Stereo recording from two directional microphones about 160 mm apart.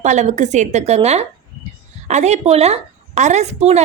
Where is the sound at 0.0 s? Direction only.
45° right (ahead or behind).